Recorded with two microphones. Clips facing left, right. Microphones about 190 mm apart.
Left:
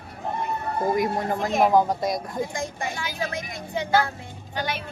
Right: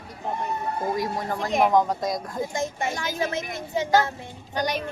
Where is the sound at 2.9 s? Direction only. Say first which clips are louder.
Right 3 dB; 40° right (ahead or behind).